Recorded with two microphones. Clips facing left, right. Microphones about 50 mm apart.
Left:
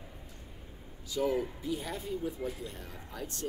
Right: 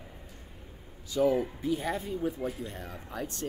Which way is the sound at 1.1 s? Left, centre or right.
Right.